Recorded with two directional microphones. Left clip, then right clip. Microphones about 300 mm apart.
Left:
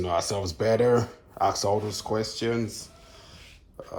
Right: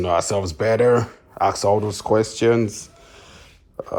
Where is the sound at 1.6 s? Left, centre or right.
Left.